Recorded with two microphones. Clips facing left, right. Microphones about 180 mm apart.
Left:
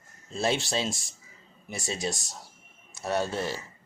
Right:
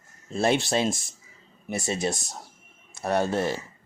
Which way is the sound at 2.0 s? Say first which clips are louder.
Right 4 dB; 55° right (ahead or behind).